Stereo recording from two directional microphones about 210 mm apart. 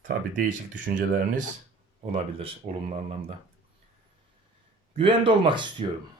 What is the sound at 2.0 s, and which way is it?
Speech, 30° right (ahead or behind).